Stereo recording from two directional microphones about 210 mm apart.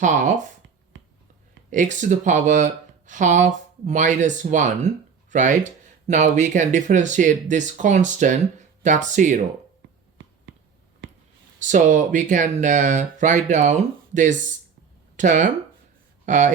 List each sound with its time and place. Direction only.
0.0 s speech: 35° right (ahead or behind)
1.7 s speech: 35° right (ahead or behind)
11.6 s speech: 35° right (ahead or behind)